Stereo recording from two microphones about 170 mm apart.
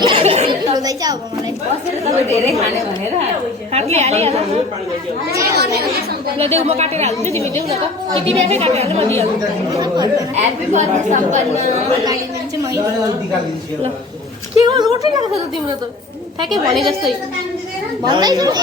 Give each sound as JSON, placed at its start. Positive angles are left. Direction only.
{"t": 0.0, "sound": "a sound", "side_deg": -35}
{"t": 0.7, "sound": "a sound", "side_deg": -20}
{"t": 2.0, "sound": "a woman's voice", "side_deg": -20}
{"t": 3.7, "sound": "a woman's voice", "side_deg": -40}
{"t": 5.3, "sound": "a woman's voice", "side_deg": -20}
{"t": 6.4, "sound": "a woman's voice", "side_deg": -40}
{"t": 7.3, "sound": "a woman's voice", "side_deg": 15}
{"t": 7.7, "sound": "a woman's voice", "side_deg": -35}
{"t": 9.7, "sound": "speech", "side_deg": -20}
{"t": 10.3, "sound": "a woman's voice", "side_deg": -45}
{"t": 14.6, "sound": "speech", "side_deg": -25}
{"t": 16.4, "sound": "speech", "side_deg": -25}
{"t": 18.0, "sound": "speech", "side_deg": -25}